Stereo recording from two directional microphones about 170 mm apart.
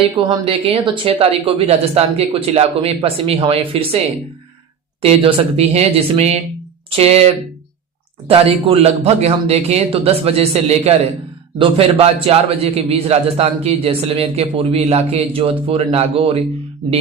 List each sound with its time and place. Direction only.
0.2 s a man's voice: 30° right (ahead or behind)
5.0 s a man's voice: 35° right (ahead or behind)
8.3 s a man's voice: 35° right (ahead or behind)